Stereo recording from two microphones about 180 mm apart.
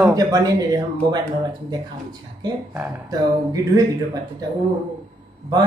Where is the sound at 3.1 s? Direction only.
20° right (ahead or behind).